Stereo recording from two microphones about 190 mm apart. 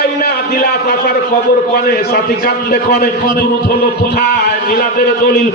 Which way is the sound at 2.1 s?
60° left (ahead or behind).